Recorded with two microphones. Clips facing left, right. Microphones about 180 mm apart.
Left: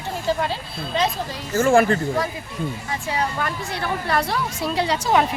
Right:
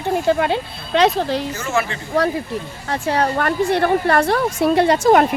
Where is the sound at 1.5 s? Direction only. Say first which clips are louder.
Left 6 dB; 45° left (ahead or behind).